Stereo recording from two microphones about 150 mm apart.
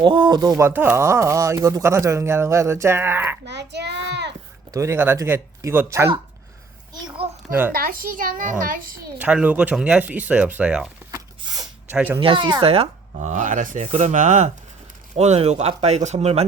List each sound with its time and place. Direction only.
0.0 s speech: 30° right (ahead or behind)
0.7 s speech: 15° right (ahead or behind)
4.7 s speech: 20° right (ahead or behind)
6.9 s a sound: 30° right (ahead or behind)
7.7 s a woman's voice: 75° right (ahead or behind)
9.2 s speech: 10° right (ahead or behind)
11.3 s a sound: 30° right (ahead or behind)
11.9 s speech: 10° right (ahead or behind)
12.2 s speech: 35° right (ahead or behind)